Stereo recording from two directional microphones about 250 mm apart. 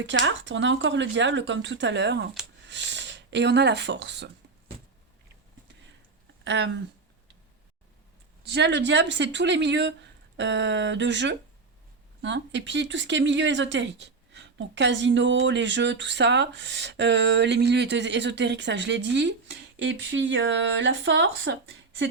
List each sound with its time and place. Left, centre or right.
0.0 s speech: right
6.4 s speech: right
8.4 s speech: right